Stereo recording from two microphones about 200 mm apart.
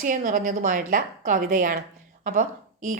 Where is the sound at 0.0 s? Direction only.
45° right (ahead or behind).